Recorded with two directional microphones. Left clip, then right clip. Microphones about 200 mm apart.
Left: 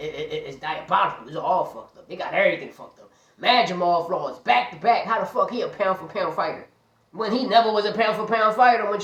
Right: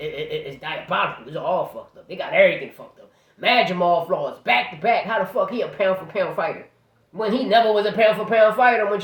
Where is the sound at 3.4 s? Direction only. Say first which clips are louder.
Right 1 dB; 20° right (ahead or behind).